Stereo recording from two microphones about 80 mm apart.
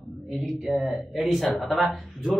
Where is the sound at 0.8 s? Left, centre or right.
Centre.